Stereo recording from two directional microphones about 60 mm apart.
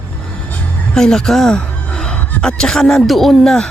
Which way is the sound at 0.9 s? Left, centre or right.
Centre.